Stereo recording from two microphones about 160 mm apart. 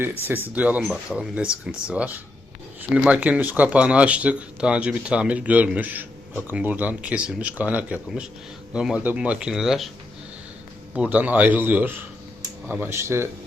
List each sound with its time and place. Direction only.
0.5 s speech: 10° right (ahead or behind)
10.9 s speech: 10° right (ahead or behind)